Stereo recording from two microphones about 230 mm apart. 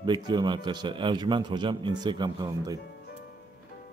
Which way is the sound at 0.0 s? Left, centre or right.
Centre.